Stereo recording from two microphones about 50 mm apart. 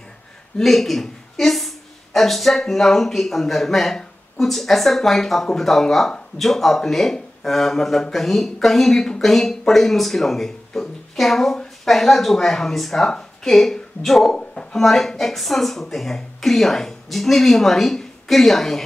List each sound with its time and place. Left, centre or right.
0.6 s speech: centre
14.3 s speech: centre
14.7 s speech: centre